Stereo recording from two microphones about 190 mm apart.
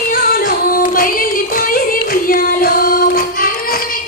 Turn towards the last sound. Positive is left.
turn(degrees=50)  # may be behind; listen again after turning